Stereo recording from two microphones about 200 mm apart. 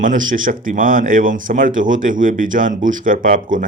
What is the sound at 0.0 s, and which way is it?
Speech, 40° right (ahead or behind).